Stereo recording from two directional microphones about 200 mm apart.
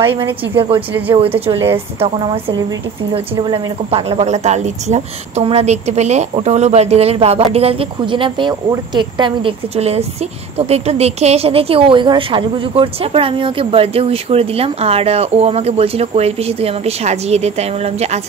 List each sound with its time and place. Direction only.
0.0 s speech: 10° right (ahead or behind)
0.6 s speech: 25° right (ahead or behind)
1.3 s speech: 10° right (ahead or behind)
2.0 s a woman's voice: 25° right (ahead or behind)